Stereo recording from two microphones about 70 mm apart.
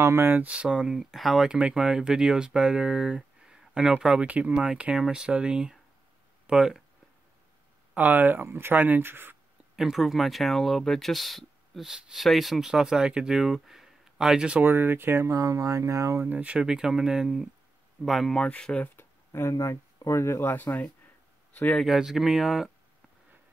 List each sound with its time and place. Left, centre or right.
0.0 s speech: right
0.3 s speech: right
3.2 s a sound: centre
4.3 s speech: centre
7.9 s speech: right
9.8 s speech: centre
14.6 s speech: right
15.3 s speech: right
16.3 s speech: centre
16.6 s speech: centre
18.9 s a sound: left
19.5 s speech: left
21.8 s speech: centre